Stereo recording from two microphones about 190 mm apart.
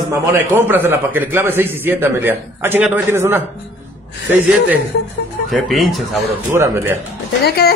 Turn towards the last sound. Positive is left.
turn(degrees=55)  # may be behind; listen again after turning